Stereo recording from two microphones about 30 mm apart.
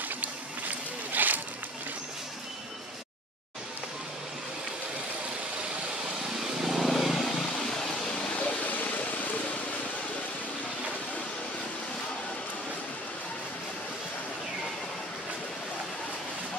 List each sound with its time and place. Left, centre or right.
0.2 s a sound: right
6.6 s vehicle: centre
6.9 s vehicle: centre
8.4 s vehicle: left